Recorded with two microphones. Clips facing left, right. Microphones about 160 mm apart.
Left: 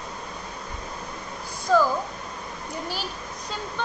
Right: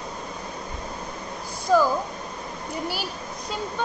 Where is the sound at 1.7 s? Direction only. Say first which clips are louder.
Right 1 dB; 15° right (ahead or behind).